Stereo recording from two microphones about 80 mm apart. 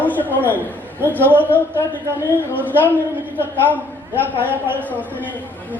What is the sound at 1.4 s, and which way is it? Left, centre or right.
Speech, left.